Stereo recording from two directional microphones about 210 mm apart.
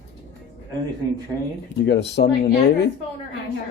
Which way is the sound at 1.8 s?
55° left (ahead or behind).